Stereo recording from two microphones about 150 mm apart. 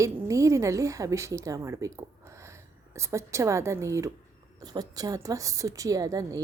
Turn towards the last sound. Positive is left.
turn(degrees=-25)  # may be behind; listen again after turning